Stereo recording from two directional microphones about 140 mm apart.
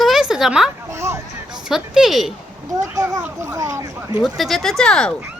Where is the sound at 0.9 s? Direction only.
20° right (ahead or behind).